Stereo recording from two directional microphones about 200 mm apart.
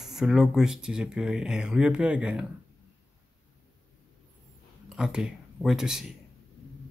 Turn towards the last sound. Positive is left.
turn(degrees=-5)  # may be behind; listen again after turning